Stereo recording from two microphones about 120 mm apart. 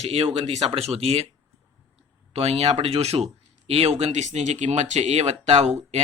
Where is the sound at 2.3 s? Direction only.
60° right (ahead or behind).